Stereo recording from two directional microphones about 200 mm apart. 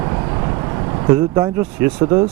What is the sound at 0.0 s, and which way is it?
Vehicle, 20° right (ahead or behind).